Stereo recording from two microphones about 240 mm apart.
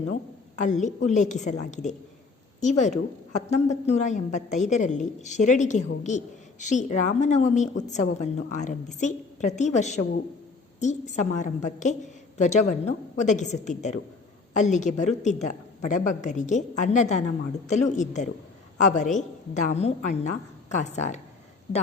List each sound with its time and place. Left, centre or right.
0.6 s a woman's voice: left